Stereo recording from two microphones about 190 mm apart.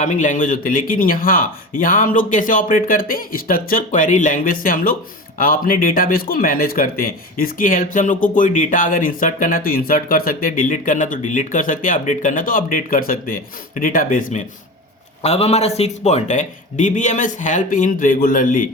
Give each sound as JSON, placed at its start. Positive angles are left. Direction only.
{"t": 0.0, "sound": "speech", "side_deg": 40}
{"t": 15.2, "sound": "a man's voice", "side_deg": 35}